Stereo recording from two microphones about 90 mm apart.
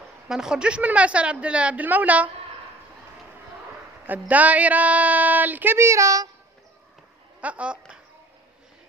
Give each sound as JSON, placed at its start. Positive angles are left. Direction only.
{"t": 0.3, "sound": "a woman's voice", "side_deg": -5}
{"t": 4.0, "sound": "speech", "side_deg": -20}
{"t": 7.3, "sound": "speech", "side_deg": -15}